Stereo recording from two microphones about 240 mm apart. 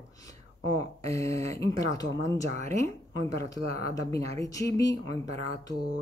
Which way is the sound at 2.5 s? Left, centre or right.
Right.